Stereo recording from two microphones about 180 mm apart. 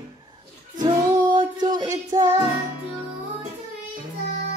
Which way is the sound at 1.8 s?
20° right (ahead or behind).